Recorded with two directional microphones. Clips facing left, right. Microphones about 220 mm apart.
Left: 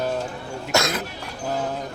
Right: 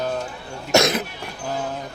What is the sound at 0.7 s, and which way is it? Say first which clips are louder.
Cough: right 5 dB; 20° right (ahead or behind).